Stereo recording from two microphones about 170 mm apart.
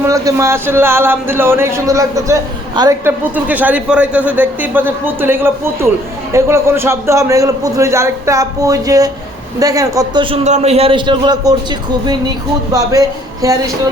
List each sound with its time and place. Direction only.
0.1 s a man's voice: 15° right (ahead or behind)
3.0 s a man's voice: 10° right (ahead or behind); by 11.5 s 25° right (ahead or behind)
12.7 s a man's voice: 20° right (ahead or behind)